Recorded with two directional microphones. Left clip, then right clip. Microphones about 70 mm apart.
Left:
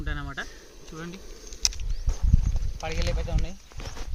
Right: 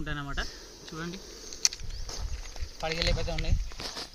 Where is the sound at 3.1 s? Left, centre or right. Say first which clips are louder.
Right 1 dB; right.